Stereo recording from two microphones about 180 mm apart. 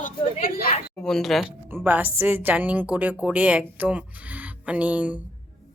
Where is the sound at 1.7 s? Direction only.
10° right (ahead or behind).